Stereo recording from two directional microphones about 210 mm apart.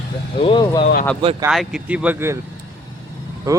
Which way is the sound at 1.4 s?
Centre (ahead or behind).